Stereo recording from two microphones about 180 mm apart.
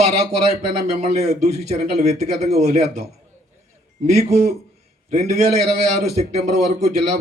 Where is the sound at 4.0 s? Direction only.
40° right (ahead or behind).